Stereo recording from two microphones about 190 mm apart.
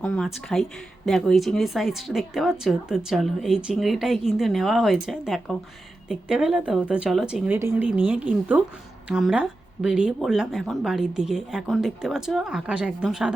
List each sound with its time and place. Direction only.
0.0 s speech: 5° left (ahead or behind)